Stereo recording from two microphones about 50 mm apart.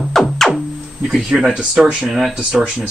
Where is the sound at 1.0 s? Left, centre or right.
Right.